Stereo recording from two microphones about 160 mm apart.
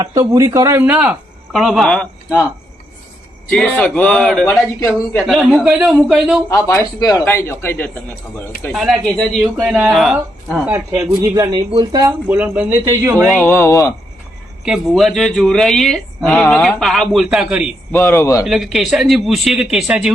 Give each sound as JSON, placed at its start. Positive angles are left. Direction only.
{"t": 0.0, "sound": "speech", "side_deg": -20}
{"t": 3.5, "sound": "speech", "side_deg": 5}
{"t": 6.5, "sound": "a man's voice", "side_deg": 15}
{"t": 8.7, "sound": "speech", "side_deg": 0}
{"t": 10.7, "sound": "speech", "side_deg": -15}
{"t": 12.3, "sound": "speech", "side_deg": -10}
{"t": 13.4, "sound": "a man's voice", "side_deg": 15}
{"t": 14.6, "sound": "speech", "side_deg": 0}
{"t": 17.9, "sound": "a man's voice", "side_deg": 15}
{"t": 18.4, "sound": "speech", "side_deg": 0}